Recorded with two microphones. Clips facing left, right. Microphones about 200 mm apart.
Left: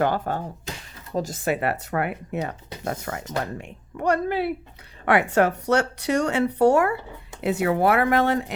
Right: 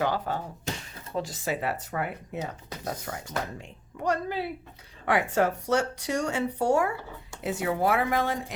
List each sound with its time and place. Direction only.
0.0 s speech: 50° left (ahead or behind); by 8.5 s 65° left (ahead or behind)